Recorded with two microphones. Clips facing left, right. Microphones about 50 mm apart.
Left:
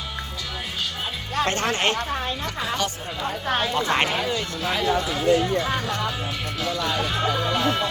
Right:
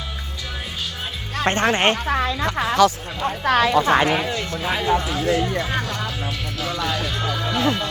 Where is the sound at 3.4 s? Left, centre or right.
Right.